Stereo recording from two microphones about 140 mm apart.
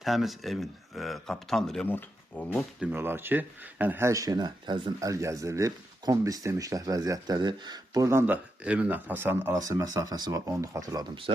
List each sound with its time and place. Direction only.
0.0 s speech: centre (ahead or behind)
2.8 s speech: 15° right (ahead or behind)